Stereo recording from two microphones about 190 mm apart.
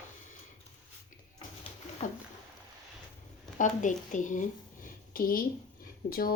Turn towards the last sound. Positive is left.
turn(degrees=50)  # may be behind; listen again after turning